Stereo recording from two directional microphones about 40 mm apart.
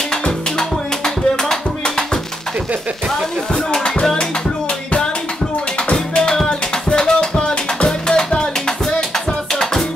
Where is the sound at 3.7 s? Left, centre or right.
Centre.